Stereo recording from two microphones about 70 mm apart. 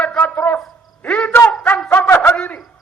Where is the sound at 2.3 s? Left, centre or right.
Centre.